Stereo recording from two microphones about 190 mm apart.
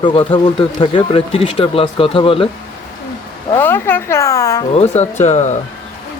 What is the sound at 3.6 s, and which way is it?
Speech, 10° left (ahead or behind).